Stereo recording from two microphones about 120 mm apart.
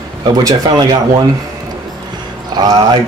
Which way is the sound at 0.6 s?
35° right (ahead or behind).